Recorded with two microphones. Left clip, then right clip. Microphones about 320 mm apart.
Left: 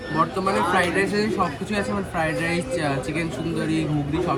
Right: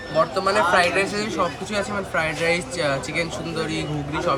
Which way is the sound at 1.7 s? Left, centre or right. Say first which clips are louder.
Right 2 dB; right.